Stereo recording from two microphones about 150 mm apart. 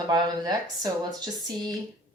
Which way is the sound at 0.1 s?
25° right (ahead or behind).